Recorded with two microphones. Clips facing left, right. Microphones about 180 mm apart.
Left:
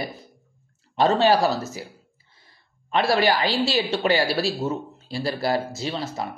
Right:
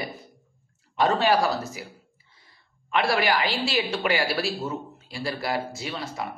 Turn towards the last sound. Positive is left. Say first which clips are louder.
# left 4 dB
turn(degrees=30)  # may be behind; listen again after turning